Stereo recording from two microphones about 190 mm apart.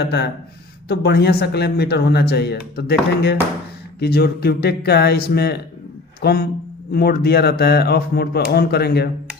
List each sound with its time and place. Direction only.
0.0 s speech: 60° left (ahead or behind)